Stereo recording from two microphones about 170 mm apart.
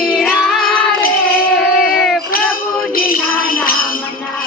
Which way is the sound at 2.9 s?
55° left (ahead or behind).